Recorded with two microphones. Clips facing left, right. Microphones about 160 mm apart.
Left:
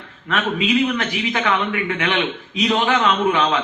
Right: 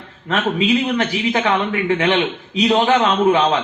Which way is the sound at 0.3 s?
30° right (ahead or behind).